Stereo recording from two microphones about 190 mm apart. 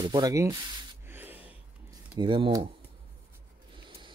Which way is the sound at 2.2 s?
25° right (ahead or behind).